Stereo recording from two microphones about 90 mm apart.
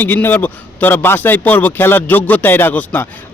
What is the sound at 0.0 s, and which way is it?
A man's voice, 20° left (ahead or behind).